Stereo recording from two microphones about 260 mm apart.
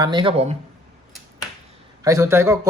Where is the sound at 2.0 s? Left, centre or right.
Centre.